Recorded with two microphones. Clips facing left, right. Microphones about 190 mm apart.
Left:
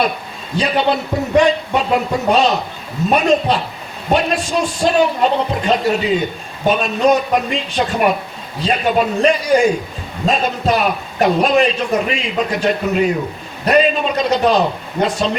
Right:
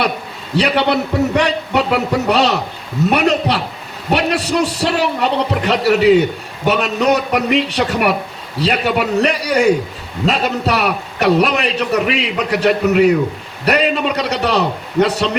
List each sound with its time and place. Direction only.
0.5 s a man's voice: 75° right (ahead or behind)